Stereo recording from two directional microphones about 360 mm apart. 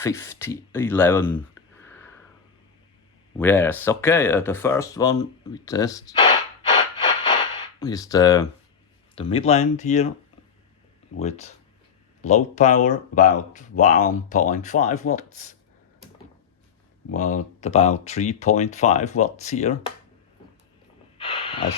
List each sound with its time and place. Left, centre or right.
0.0 s speech: centre
1.8 s sniff: centre
3.3 s speech: centre
11.2 s speech: centre
17.1 s speech: left
21.2 s a sound: centre